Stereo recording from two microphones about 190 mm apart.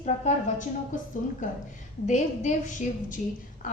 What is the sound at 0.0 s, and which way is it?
Speech, 35° left (ahead or behind).